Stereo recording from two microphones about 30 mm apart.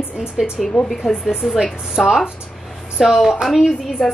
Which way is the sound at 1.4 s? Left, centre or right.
Centre.